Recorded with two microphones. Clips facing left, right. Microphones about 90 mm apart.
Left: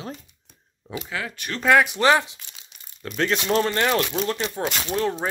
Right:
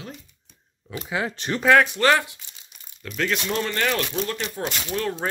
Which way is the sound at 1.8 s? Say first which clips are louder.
Left 1 dB; 15° left (ahead or behind).